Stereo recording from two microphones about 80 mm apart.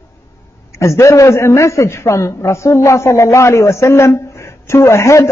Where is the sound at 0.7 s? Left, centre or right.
Left.